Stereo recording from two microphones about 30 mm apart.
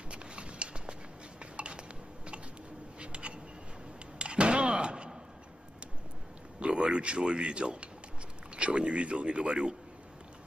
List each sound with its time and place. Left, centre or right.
0.1 s a sound: right
4.7 s slam: right
6.7 s speech: right